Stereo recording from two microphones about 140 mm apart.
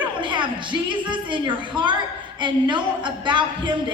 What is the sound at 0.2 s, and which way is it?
A woman's voice, 35° right (ahead or behind).